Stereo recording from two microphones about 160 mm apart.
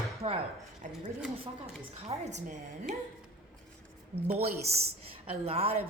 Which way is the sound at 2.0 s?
40° right (ahead or behind).